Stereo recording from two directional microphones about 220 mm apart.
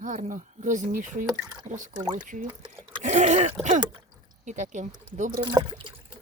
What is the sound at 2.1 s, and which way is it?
Speech, 35° right (ahead or behind).